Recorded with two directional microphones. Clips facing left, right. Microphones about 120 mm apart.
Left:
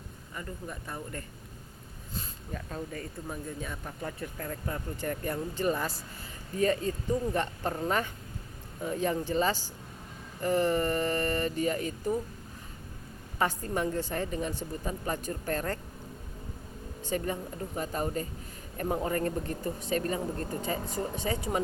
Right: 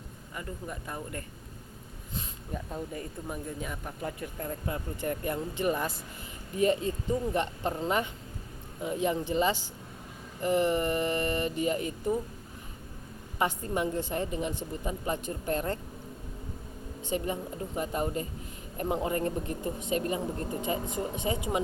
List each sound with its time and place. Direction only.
0.3 s speech: 15° right (ahead or behind)
13.4 s speech: 20° right (ahead or behind)
17.0 s speech: 20° right (ahead or behind)